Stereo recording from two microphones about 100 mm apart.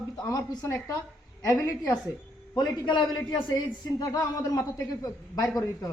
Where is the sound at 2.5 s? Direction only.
50° left (ahead or behind).